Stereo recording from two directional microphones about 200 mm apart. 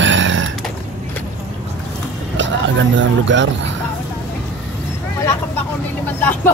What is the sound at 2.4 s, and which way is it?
Vehicle, 65° right (ahead or behind).